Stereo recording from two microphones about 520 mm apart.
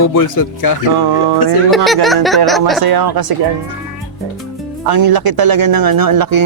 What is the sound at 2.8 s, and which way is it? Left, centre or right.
Speech, right.